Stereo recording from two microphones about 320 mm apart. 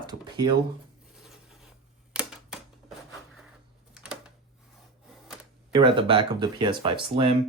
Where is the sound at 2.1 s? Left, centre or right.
Centre.